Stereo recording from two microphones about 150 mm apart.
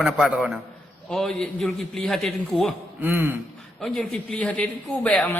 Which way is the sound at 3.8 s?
5° left (ahead or behind).